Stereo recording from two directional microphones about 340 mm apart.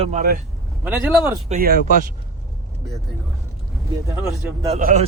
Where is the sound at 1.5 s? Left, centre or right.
Right.